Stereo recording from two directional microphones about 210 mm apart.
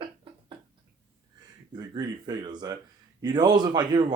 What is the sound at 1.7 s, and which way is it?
Speech, 20° right (ahead or behind).